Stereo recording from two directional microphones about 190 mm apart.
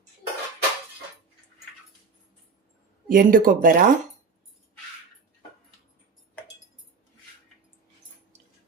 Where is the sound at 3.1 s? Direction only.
50° right (ahead or behind).